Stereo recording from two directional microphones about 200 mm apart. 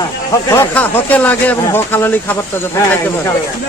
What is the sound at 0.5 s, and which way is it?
Speech, 10° left (ahead or behind).